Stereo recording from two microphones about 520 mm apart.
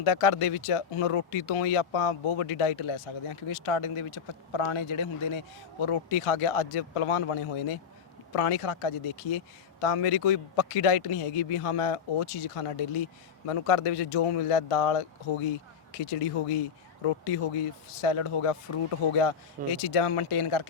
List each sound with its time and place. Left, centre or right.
0.0 s speech: left
17.0 s speech: left
18.0 s speech: left